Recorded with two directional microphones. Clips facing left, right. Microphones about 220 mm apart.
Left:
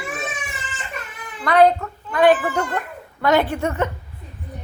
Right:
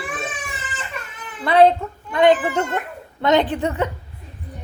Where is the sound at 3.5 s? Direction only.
15° right (ahead or behind).